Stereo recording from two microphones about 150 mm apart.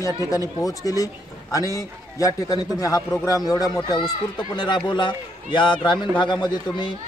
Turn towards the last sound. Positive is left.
turn(degrees=30)  # may be behind; listen again after turning